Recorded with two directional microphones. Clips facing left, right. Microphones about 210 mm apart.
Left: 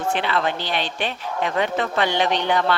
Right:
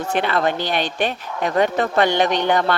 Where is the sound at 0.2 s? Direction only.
50° right (ahead or behind).